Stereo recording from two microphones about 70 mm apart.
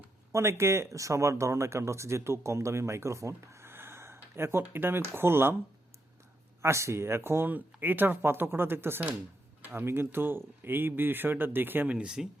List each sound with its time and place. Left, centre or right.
0.3 s speech: right
6.6 s speech: right
11.9 s speech: centre